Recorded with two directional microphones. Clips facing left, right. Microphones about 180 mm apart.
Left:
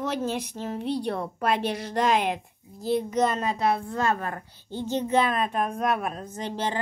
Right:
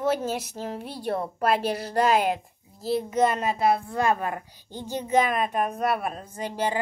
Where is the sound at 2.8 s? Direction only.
5° right (ahead or behind).